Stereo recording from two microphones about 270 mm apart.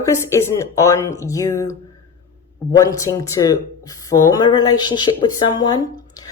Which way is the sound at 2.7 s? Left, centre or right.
Centre.